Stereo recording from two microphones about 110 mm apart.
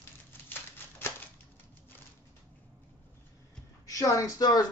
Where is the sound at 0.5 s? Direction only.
20° left (ahead or behind).